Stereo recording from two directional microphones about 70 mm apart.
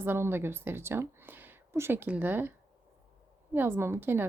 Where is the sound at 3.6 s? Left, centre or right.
Right.